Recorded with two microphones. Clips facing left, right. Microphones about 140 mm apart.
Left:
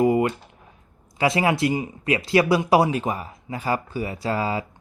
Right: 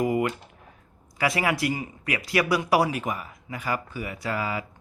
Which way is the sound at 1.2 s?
25° left (ahead or behind).